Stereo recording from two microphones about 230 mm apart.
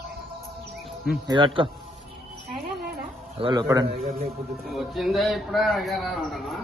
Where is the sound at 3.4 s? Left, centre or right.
Centre.